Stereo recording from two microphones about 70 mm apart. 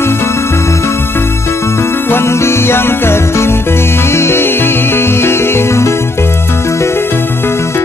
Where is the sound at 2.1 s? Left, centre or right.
Left.